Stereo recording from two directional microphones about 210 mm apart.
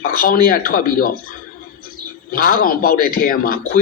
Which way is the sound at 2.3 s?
40° left (ahead or behind).